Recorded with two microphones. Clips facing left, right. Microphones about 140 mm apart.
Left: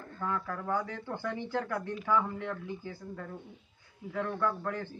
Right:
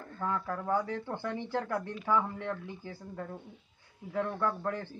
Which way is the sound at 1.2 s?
5° right (ahead or behind).